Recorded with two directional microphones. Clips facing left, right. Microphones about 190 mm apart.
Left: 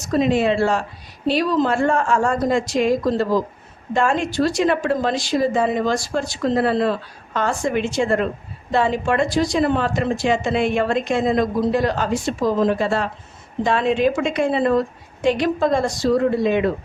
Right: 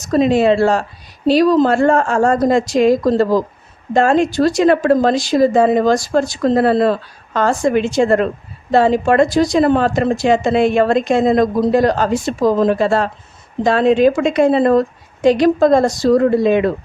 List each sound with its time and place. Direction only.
0.0 s speech: 40° right (ahead or behind)